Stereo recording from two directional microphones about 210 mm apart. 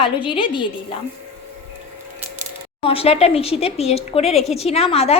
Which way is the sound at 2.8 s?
30° left (ahead or behind).